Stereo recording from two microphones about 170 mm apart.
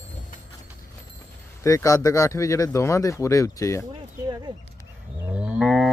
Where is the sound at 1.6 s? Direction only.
20° left (ahead or behind).